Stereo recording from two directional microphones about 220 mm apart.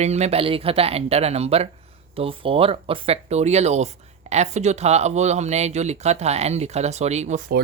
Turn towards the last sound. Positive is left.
turn(degrees=-35)  # may be behind; listen again after turning